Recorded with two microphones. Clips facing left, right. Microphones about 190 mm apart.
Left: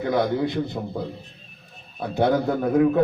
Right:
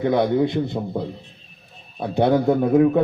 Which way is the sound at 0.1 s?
25° right (ahead or behind).